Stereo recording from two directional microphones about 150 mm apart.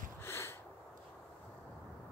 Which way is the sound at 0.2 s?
15° left (ahead or behind).